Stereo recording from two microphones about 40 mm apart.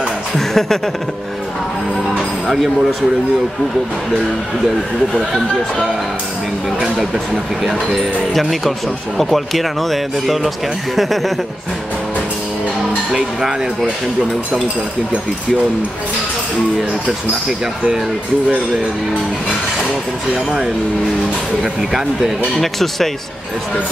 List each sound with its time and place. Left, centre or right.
0.3 s speech: centre
2.4 s speech: centre
8.3 s speech: centre
13.1 s speech: centre
20.3 s speech: centre
22.6 s speech: centre